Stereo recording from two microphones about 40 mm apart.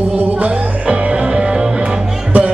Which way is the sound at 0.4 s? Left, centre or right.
Right.